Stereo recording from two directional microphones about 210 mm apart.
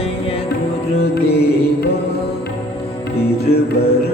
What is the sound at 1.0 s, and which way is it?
Music, 50° left (ahead or behind).